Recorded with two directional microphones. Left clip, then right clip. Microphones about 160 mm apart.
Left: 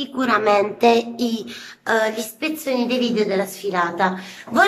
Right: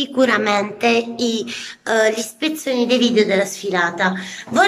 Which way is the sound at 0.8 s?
25° left (ahead or behind).